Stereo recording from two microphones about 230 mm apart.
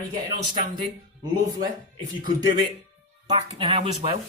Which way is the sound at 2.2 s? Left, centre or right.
Centre.